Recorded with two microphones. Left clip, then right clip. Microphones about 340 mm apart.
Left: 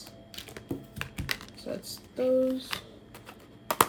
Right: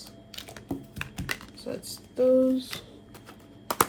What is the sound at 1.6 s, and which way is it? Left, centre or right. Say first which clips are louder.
Speech: right 1 dB; right.